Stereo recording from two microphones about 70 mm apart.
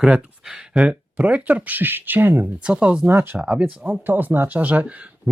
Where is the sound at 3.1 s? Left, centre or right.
Right.